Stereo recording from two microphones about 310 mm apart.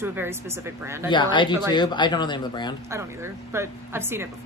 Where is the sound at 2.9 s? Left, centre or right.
Centre.